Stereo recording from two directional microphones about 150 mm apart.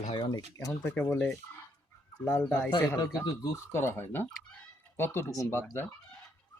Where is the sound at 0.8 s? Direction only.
10° left (ahead or behind).